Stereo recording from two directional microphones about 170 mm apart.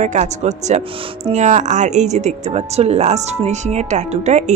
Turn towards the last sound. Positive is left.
turn(degrees=-40)  # may be behind; listen again after turning